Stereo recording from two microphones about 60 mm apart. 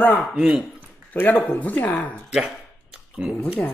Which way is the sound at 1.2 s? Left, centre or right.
Left.